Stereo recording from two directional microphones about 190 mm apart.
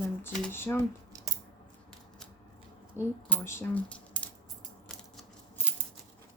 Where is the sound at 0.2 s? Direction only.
10° left (ahead or behind).